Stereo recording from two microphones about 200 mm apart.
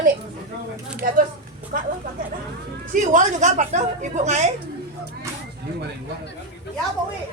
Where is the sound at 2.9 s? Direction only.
40° right (ahead or behind).